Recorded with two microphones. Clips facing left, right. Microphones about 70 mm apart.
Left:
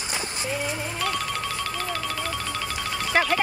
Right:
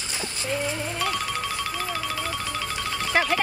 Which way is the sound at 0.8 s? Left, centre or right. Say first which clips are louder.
Even; centre.